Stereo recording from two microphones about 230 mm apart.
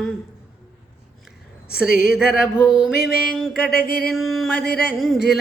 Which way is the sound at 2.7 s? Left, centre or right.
Centre.